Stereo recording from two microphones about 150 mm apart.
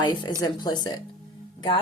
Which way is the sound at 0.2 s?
25° left (ahead or behind).